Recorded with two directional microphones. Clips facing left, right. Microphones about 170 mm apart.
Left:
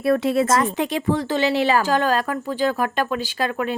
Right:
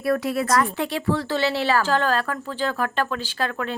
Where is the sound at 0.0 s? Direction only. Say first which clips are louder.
Left 4 dB; 25° left (ahead or behind).